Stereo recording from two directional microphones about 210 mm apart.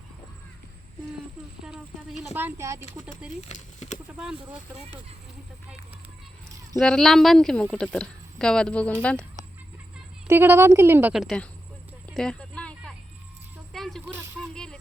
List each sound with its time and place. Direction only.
1.6 s speech: centre (ahead or behind)
3.4 s speech: 35° left (ahead or behind)
6.7 s a woman's voice: centre (ahead or behind)
10.2 s speech: 10° right (ahead or behind)
12.0 s a sound: 5° left (ahead or behind)
14.0 s a sound: 10° right (ahead or behind)
14.5 s music: 5° left (ahead or behind)